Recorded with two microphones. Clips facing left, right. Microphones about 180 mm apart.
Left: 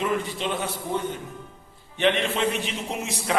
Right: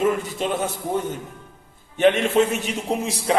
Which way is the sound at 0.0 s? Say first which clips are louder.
Right 4 dB; 45° right (ahead or behind).